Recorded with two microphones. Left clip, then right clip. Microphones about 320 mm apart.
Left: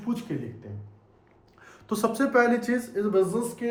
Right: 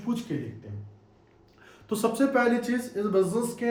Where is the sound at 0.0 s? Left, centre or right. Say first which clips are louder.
Even; centre.